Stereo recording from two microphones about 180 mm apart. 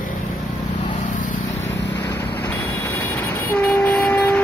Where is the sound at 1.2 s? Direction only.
45° left (ahead or behind).